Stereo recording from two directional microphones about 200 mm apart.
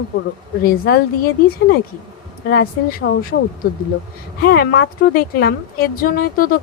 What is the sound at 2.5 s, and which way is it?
Speech, 45° left (ahead or behind).